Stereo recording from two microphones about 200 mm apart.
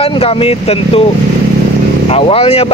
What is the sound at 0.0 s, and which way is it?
Speech, 30° left (ahead or behind).